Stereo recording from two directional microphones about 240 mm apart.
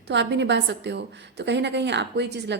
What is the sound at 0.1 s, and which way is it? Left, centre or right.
A woman's voice, right.